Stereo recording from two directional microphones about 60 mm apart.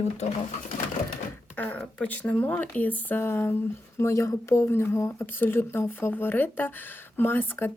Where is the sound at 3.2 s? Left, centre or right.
Left.